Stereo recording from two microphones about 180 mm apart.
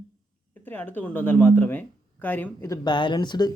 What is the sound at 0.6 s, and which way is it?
Speech, 10° left (ahead or behind).